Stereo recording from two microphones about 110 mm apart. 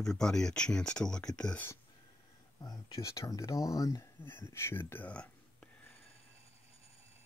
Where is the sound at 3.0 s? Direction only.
30° left (ahead or behind); by 5.7 s 15° left (ahead or behind).